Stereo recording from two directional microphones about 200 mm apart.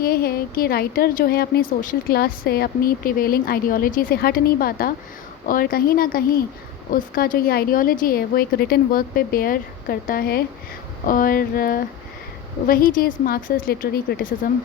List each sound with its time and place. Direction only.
0.0 s a woman's voice: 50° left (ahead or behind)